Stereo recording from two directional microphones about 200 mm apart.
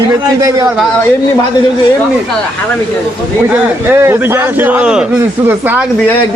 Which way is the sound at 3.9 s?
10° right (ahead or behind).